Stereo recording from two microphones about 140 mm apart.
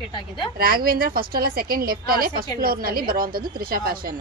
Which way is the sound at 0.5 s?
90° right.